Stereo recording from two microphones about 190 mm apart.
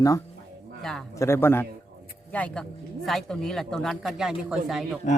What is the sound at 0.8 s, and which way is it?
Speech, centre (ahead or behind).